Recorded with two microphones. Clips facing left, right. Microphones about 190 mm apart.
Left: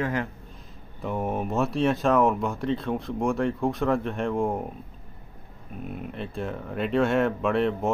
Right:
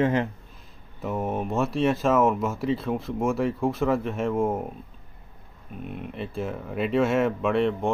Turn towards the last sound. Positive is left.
turn(degrees=0)  # may be behind; listen again after turning